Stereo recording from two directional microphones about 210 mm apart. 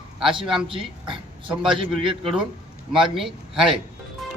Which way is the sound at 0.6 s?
25° right (ahead or behind).